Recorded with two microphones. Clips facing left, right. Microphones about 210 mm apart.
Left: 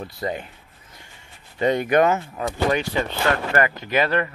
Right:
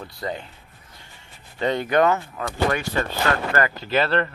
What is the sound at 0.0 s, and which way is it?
Speech, 20° left (ahead or behind).